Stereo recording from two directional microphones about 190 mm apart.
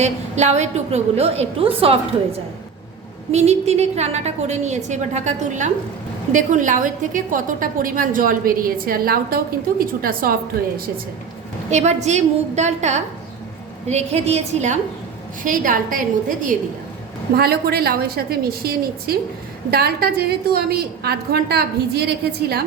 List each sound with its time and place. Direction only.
0.0 s a woman's voice: 35° right (ahead or behind)
11.7 s a woman's voice: 35° right (ahead or behind)
17.3 s a woman's voice: 55° right (ahead or behind)